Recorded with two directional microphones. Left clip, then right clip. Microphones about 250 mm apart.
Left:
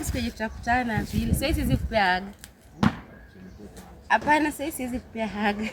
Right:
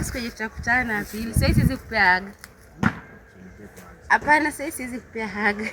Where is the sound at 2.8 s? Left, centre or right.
Left.